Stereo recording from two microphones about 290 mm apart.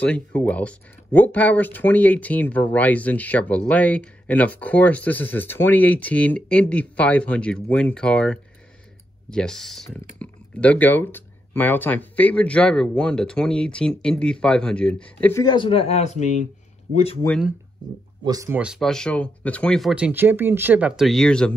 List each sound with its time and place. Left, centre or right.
0.0 s speech: centre; by 17.3 s left
18.2 s speech: centre